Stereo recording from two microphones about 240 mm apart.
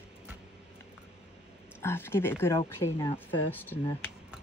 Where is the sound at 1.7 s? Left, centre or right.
Centre.